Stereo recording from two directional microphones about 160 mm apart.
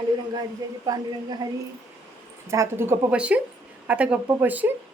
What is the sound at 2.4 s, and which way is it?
A woman's voice, 20° right (ahead or behind).